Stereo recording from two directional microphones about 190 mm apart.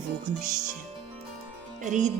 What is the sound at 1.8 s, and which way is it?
Speech, 40° right (ahead or behind).